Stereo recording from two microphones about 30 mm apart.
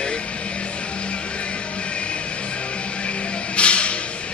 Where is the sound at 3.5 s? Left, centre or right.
Left.